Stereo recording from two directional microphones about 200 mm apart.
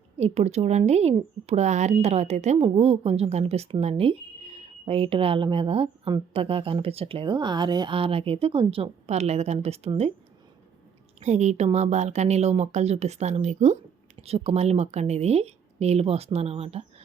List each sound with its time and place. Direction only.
0.2 s a woman's voice: 35° right (ahead or behind)
11.2 s speech: 35° right (ahead or behind)